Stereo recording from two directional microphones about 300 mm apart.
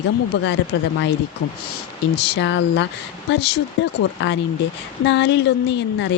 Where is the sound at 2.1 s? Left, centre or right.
Left.